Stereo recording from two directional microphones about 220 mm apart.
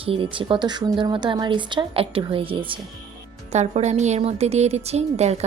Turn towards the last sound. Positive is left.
turn(degrees=-30)  # may be behind; listen again after turning